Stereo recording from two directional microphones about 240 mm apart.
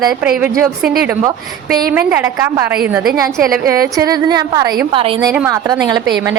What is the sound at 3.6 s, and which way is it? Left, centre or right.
A woman's voice, centre.